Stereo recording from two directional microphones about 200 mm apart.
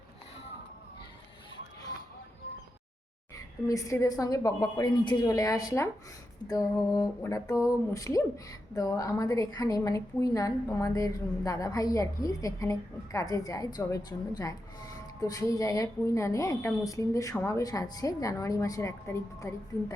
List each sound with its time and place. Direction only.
3.3 s a woman's voice: 15° left (ahead or behind)
6.9 s a woman's voice: 15° left (ahead or behind)